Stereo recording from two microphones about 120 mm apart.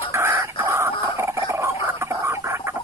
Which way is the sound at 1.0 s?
25° right (ahead or behind).